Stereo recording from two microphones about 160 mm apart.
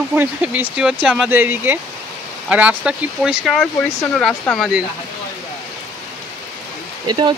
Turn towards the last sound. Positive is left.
turn(degrees=-30)  # may be behind; listen again after turning